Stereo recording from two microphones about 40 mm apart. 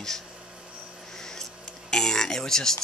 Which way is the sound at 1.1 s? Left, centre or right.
Centre.